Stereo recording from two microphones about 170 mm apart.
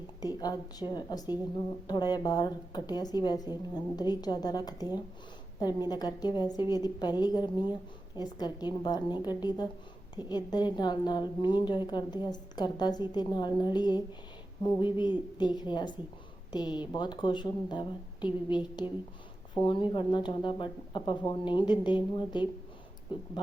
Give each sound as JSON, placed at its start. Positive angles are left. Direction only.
{"t": 0.2, "sound": "a woman's voice", "side_deg": 20}